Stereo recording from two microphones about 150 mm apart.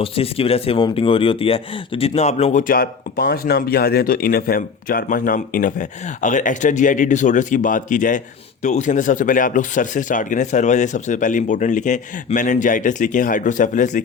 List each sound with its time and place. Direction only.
0.0 s speech: 40° left (ahead or behind); by 14.0 s 55° left (ahead or behind)